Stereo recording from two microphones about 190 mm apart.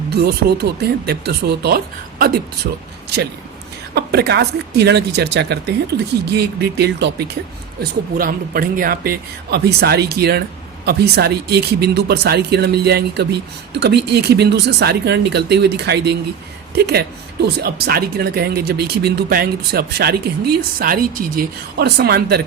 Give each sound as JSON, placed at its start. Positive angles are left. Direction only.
{"t": 0.1, "sound": "speech", "side_deg": -55}
{"t": 3.9, "sound": "speech", "side_deg": -60}